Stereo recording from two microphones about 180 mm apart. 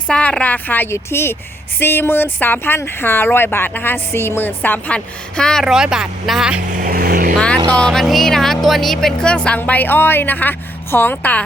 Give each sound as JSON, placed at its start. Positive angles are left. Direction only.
{"t": 0.1, "sound": "speech", "side_deg": 5}
{"t": 6.7, "sound": "vehicle", "side_deg": -50}
{"t": 7.3, "sound": "vehicle", "side_deg": 5}
{"t": 7.7, "sound": "speech", "side_deg": 5}